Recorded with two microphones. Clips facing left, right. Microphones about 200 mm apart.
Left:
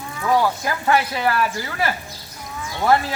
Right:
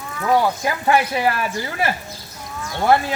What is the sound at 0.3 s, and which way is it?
Speech, 15° right (ahead or behind).